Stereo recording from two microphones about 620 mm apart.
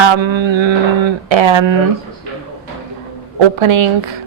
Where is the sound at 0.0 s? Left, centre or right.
Right.